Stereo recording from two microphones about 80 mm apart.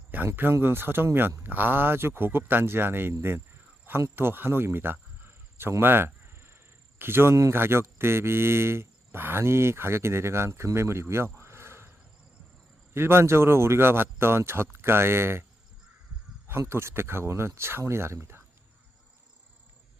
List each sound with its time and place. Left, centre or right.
0.3 s speech: right
5.8 s a sound: right
7.0 s a man's voice: right
16.5 s a man's voice: right